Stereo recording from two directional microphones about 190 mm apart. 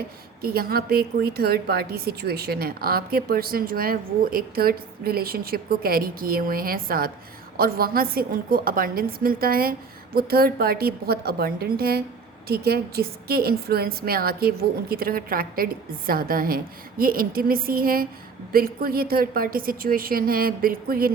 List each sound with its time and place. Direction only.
0.4 s a woman's voice: 55° right (ahead or behind)